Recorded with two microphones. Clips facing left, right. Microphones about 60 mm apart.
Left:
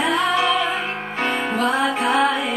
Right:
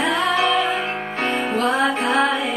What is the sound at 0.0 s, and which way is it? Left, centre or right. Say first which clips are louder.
Music: even; centre.